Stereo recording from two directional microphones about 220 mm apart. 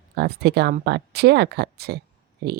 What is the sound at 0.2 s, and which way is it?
A woman's voice, 45° right (ahead or behind).